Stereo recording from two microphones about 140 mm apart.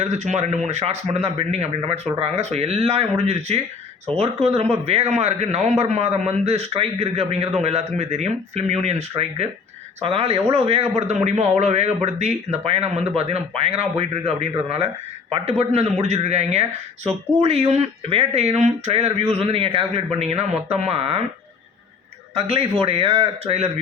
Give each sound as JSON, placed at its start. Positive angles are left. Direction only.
{"t": 0.0, "sound": "a man's voice", "side_deg": -55}
{"t": 22.4, "sound": "a man's voice", "side_deg": -40}